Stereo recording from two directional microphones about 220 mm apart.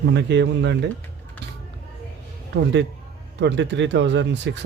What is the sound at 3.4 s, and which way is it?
Speech, 55° right (ahead or behind).